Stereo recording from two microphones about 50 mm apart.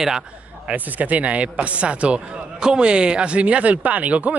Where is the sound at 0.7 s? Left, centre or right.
Right.